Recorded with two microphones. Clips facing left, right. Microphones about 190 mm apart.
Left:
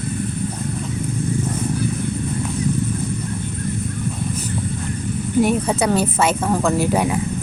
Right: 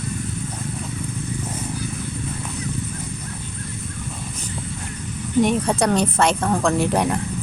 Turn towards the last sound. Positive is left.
turn(degrees=5)  # may be behind; listen again after turning